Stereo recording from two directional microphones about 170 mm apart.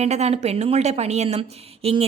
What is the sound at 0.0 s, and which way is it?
A woman's voice, 40° right (ahead or behind).